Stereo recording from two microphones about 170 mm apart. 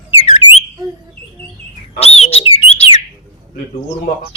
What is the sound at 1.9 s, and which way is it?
Bird, 35° left (ahead or behind).